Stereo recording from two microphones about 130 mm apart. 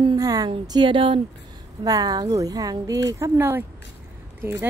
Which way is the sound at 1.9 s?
30° right (ahead or behind).